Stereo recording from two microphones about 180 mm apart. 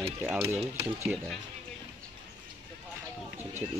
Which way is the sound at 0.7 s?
15° right (ahead or behind).